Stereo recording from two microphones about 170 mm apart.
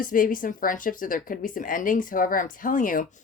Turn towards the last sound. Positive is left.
turn(degrees=50)  # may be behind; listen again after turning